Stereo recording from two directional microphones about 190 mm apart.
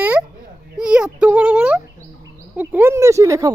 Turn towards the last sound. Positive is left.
turn(degrees=-15)  # may be behind; listen again after turning